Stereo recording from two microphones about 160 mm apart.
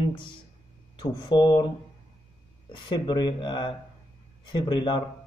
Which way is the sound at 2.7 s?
30° left (ahead or behind).